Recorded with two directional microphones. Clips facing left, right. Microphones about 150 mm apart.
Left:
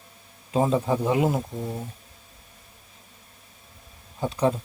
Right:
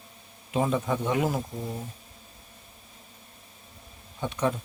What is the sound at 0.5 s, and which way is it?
A man's voice, 30° left (ahead or behind).